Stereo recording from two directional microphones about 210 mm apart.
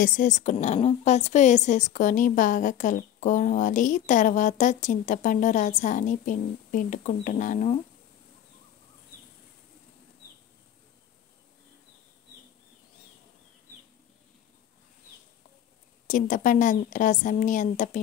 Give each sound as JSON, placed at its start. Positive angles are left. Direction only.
{"t": 0.0, "sound": "a woman's voice", "side_deg": 40}
{"t": 16.1, "sound": "a woman's voice", "side_deg": 40}